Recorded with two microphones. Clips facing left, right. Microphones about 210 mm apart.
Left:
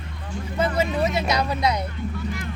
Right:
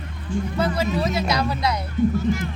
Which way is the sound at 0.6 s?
20° left (ahead or behind).